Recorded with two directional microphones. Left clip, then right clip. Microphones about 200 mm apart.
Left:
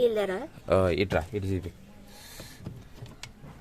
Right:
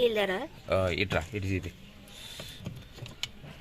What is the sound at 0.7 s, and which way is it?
Speech, 55° left (ahead or behind).